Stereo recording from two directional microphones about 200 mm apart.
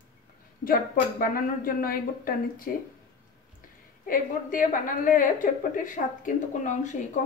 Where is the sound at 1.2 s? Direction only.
45° left (ahead or behind).